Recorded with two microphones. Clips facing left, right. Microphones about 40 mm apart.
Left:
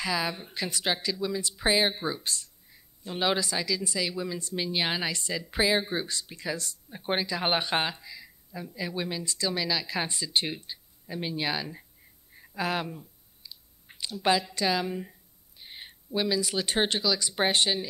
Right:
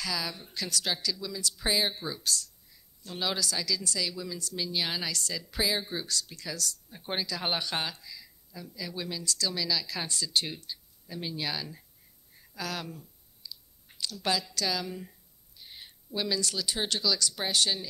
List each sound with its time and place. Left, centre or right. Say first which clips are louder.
0.0 s speech: left 5 dB; left
12.4 s clicking: left 7 dB; left
16.2 s speech: left 4 dB; centre
16.5 s speech: left 6 dB; left
16.9 s speech: left 2 dB; left